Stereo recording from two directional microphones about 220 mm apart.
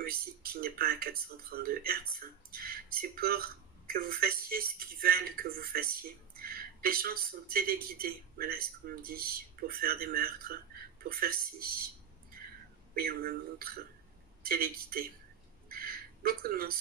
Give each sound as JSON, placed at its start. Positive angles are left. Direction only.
{"t": 0.0, "sound": "speech", "side_deg": -45}
{"t": 12.9, "sound": "speech", "side_deg": -45}
{"t": 15.7, "sound": "a sound", "side_deg": -40}